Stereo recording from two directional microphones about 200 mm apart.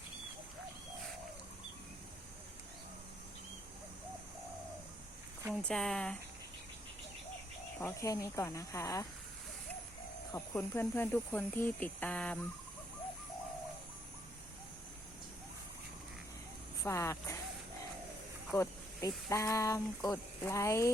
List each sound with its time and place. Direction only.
5.6 s speech: centre (ahead or behind)
7.8 s speech: 15° left (ahead or behind)
10.3 s speech: 10° left (ahead or behind)
16.8 s speech: 15° left (ahead or behind)
18.5 s speech: 15° left (ahead or behind)